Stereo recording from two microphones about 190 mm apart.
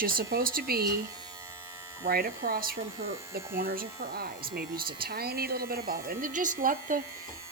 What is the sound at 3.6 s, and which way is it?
A woman's voice, 50° right (ahead or behind).